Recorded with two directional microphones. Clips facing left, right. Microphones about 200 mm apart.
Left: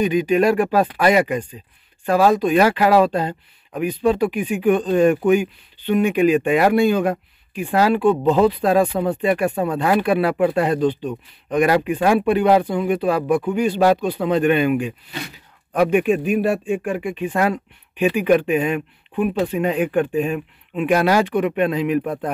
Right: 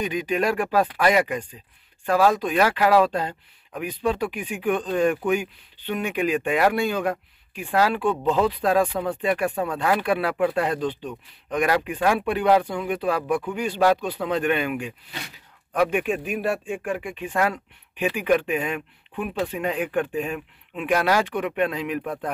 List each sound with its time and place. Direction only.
0.4 s speech: 25° left (ahead or behind)
15.9 s speech: 10° left (ahead or behind)
22.0 s speech: 25° left (ahead or behind)